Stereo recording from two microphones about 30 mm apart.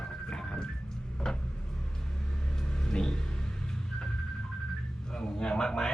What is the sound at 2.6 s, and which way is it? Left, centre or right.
Vehicle, centre.